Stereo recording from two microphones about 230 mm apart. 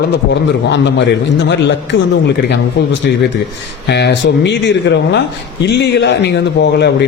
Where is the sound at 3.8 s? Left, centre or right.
Left.